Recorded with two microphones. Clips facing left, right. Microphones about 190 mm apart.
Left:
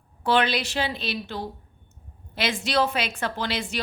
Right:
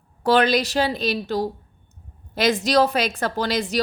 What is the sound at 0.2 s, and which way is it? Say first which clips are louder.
A woman's voice: right 5 dB; 40° right (ahead or behind).